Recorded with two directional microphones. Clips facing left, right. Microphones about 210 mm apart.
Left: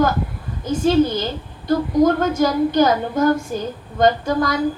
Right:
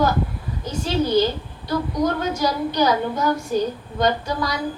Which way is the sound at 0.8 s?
50° left (ahead or behind).